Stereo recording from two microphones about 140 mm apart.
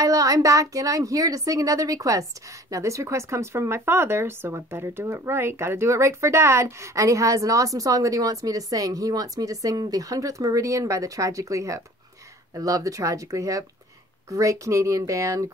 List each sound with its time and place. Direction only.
0.0 s speech: 25° right (ahead or behind)